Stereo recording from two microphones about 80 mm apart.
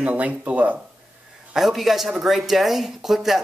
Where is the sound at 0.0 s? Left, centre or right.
Centre.